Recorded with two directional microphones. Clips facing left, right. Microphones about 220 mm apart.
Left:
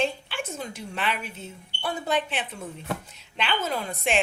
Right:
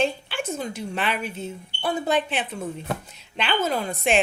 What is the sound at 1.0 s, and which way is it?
Speech, 40° right (ahead or behind).